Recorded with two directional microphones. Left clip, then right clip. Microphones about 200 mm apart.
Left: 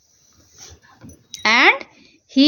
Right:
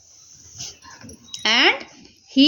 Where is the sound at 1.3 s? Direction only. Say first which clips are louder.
Left 3 dB; 60° left (ahead or behind).